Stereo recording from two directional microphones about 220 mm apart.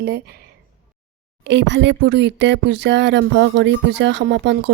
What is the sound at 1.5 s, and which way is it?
Speech, 55° right (ahead or behind).